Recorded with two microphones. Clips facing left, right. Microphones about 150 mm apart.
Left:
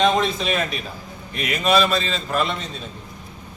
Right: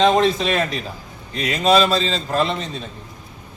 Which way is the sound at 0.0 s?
35° right (ahead or behind).